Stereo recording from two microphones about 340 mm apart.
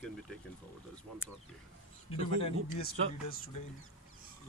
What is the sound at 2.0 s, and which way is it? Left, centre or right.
Speech, left.